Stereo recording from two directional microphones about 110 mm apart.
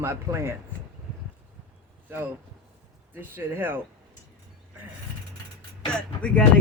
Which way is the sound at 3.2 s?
20° right (ahead or behind).